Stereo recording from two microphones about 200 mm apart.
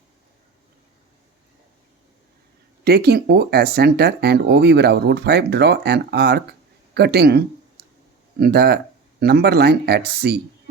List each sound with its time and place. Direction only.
2.8 s speech: 55° right (ahead or behind)